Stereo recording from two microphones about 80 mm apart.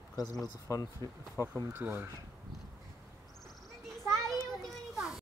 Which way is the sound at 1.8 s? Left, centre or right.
Right.